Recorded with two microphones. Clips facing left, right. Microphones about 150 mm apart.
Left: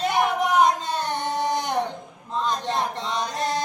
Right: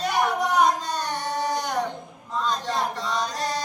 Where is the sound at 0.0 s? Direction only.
20° left (ahead or behind).